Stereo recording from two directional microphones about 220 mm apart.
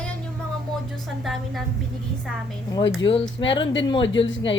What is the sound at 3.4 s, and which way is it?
Speech, 20° left (ahead or behind).